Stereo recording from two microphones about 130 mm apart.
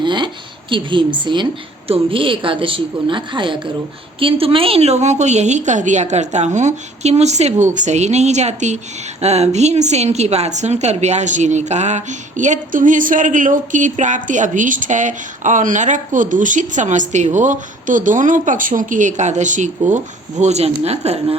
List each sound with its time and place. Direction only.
0.0 s a woman's voice: 35° right (ahead or behind); by 20.0 s 70° right (ahead or behind)
20.4 s speech: 55° right (ahead or behind)